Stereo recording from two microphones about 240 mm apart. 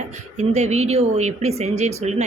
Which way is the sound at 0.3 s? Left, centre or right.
Right.